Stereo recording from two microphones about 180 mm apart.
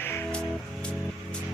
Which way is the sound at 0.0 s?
10° left (ahead or behind).